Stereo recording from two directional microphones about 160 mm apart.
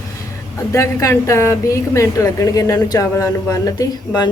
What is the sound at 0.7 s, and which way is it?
A woman's voice, 20° left (ahead or behind).